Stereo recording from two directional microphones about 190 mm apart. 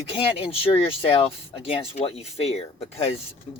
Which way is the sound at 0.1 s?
30° left (ahead or behind).